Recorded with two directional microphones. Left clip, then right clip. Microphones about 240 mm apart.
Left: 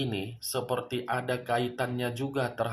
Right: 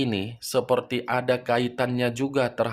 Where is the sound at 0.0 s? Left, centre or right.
Right.